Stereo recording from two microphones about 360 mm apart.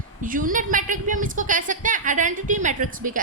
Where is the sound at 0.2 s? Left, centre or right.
Right.